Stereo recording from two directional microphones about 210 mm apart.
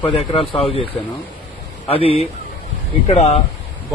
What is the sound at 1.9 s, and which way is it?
A man's voice, 30° left (ahead or behind).